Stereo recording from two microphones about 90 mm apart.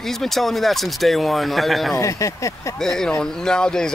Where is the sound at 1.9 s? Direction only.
35° left (ahead or behind).